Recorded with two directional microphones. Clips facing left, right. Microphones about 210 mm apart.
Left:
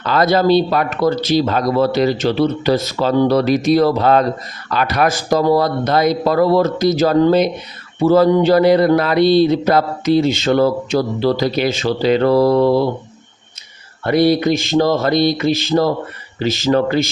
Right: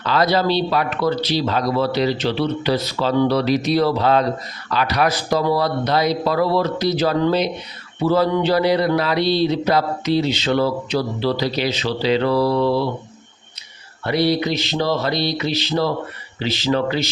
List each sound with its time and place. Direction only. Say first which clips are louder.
0.0 s speech: left 4 dB; 50° left (ahead or behind)
14.0 s speech: left 5 dB; 50° left (ahead or behind)